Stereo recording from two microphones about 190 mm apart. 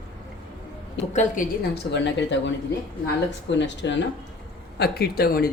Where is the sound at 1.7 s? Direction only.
65° left (ahead or behind).